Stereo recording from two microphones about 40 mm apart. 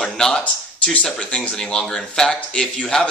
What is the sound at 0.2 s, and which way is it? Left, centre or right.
A man's voice, left.